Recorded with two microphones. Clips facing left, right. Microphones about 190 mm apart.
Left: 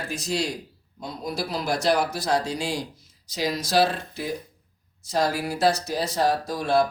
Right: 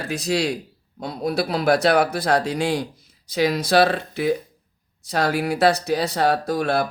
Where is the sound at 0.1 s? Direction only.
70° right (ahead or behind).